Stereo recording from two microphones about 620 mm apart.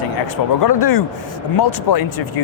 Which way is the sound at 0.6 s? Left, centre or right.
Left.